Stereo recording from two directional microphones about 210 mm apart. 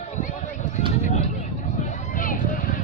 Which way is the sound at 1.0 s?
30° left (ahead or behind).